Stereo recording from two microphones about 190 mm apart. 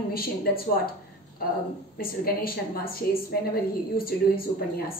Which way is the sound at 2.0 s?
50° left (ahead or behind).